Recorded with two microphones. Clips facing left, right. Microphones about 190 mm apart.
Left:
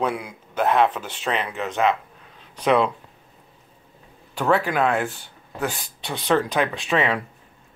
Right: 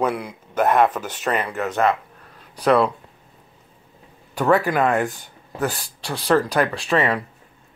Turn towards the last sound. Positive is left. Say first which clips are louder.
# right 2 dB
turn(degrees=0)  # may be behind; listen again after turning